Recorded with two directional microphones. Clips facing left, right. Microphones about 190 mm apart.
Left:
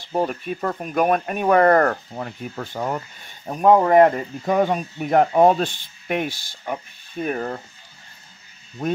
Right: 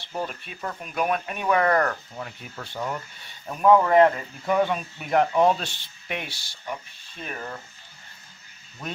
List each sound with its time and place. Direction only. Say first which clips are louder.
0.1 s speech: left 9 dB; 50° left (ahead or behind)